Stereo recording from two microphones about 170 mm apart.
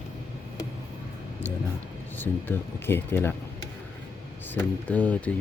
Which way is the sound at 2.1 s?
15° left (ahead or behind).